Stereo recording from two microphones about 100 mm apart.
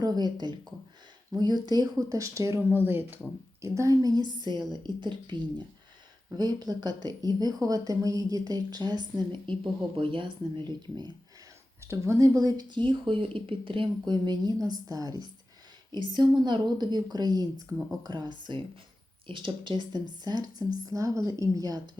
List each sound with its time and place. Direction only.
0.0 s speech: 40° right (ahead or behind)
2.7 s speech: 20° right (ahead or behind)
3.6 s speech: 35° right (ahead or behind); by 5.6 s 50° right (ahead or behind)
6.3 s speech: 40° right (ahead or behind)
11.8 s speech: 30° right (ahead or behind)